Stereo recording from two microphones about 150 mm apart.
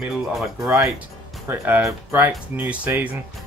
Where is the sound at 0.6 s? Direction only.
20° right (ahead or behind).